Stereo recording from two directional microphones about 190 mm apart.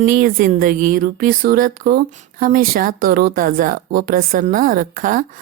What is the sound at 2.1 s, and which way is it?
A woman's voice, 40° right (ahead or behind).